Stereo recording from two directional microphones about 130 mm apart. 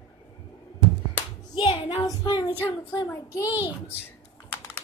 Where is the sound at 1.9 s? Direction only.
30° left (ahead or behind).